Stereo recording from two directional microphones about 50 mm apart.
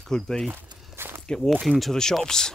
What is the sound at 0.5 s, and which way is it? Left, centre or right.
Walk, right.